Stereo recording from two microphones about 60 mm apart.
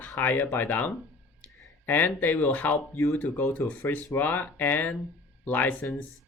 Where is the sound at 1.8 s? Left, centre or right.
Left.